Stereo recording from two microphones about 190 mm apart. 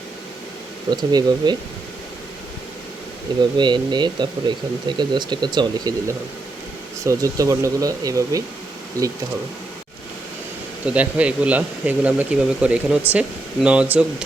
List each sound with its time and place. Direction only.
0.9 s speech: 20° right (ahead or behind)
3.6 s speech: 25° right (ahead or behind)
10.8 s speech: 5° right (ahead or behind)